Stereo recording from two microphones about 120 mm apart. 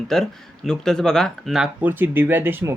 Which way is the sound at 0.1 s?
5° left (ahead or behind).